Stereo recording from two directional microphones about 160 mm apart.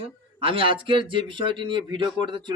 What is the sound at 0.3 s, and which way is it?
Speech, 35° right (ahead or behind).